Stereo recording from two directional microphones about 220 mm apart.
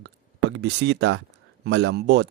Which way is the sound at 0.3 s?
50° right (ahead or behind).